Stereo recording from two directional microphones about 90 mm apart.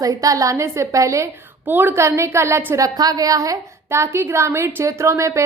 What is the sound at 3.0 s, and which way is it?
A woman's voice, 40° right (ahead or behind).